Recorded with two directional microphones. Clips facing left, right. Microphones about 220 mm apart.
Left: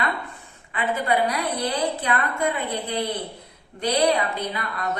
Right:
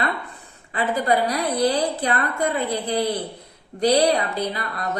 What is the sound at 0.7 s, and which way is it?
A woman's voice, 35° right (ahead or behind).